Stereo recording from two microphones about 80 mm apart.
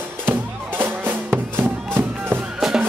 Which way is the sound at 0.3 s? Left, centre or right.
Right.